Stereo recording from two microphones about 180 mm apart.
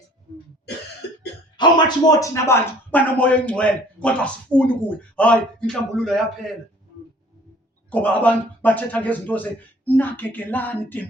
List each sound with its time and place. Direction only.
1.5 s speech: 25° left (ahead or behind); by 6.2 s centre (ahead or behind)
7.9 s speech: 10° left (ahead or behind)